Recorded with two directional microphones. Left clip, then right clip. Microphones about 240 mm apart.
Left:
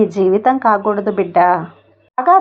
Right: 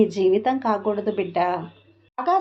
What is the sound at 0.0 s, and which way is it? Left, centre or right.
Speech, left.